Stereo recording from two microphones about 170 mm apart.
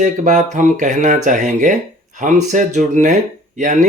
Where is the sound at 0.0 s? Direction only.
45° right (ahead or behind).